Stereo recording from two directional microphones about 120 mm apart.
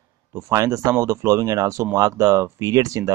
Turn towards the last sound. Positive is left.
turn(degrees=-30)  # may be behind; listen again after turning